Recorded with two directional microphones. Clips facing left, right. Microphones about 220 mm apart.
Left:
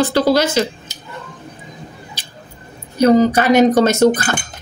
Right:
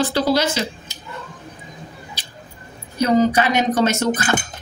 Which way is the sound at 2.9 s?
45° left (ahead or behind).